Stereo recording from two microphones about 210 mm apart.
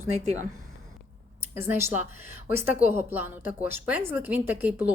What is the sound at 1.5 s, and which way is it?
Speech, 10° right (ahead or behind).